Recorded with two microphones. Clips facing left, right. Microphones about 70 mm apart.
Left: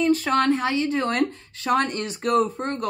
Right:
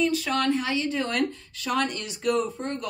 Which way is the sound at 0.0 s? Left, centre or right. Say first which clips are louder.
Left 4 dB; left.